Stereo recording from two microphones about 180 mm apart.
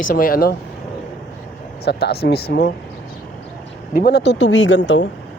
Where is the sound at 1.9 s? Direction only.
65° left (ahead or behind).